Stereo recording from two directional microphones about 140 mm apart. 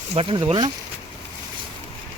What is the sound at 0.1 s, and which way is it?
Speech, 40° right (ahead or behind).